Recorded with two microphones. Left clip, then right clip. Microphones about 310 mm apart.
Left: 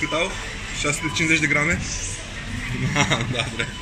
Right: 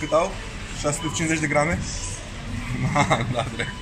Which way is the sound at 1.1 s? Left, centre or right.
Right.